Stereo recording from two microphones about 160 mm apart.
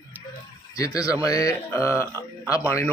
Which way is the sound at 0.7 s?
20° left (ahead or behind).